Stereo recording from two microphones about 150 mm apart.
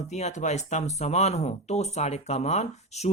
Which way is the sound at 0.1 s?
50° left (ahead or behind).